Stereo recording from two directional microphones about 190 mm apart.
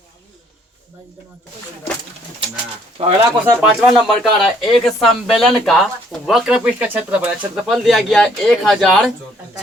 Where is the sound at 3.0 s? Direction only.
30° right (ahead or behind).